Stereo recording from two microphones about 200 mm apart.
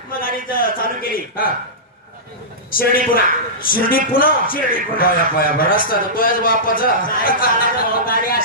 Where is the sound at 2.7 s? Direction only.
45° left (ahead or behind).